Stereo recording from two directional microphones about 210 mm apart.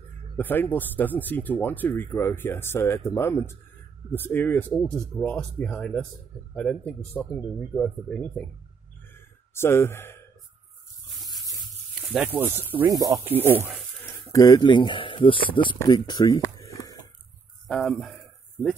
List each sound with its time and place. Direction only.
0.4 s speech: 10° left (ahead or behind)
9.5 s speech: 10° left (ahead or behind)
12.1 s speech: 5° right (ahead or behind)
14.3 s speech: 15° left (ahead or behind)
17.6 s speech: 5° left (ahead or behind)